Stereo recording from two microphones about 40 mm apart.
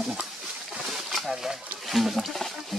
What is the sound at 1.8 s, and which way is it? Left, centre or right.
Speech, centre.